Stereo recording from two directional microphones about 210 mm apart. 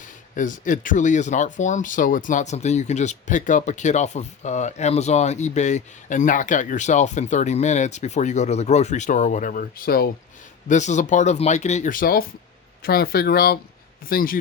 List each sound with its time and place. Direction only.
0.3 s speech: 40° left (ahead or behind)
10.7 s speech: 35° left (ahead or behind)